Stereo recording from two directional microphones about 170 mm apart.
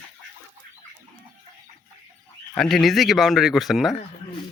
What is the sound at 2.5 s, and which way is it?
Speech, centre (ahead or behind).